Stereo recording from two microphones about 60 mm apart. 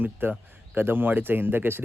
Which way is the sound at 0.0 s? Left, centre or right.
Right.